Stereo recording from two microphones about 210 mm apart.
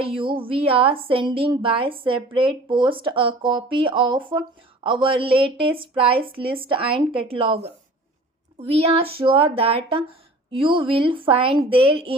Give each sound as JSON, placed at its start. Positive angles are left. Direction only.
{"t": 0.0, "sound": "a woman's voice", "side_deg": -25}